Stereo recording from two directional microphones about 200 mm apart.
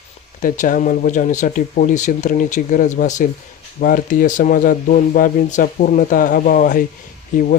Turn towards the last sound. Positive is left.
turn(degrees=40)  # may be behind; listen again after turning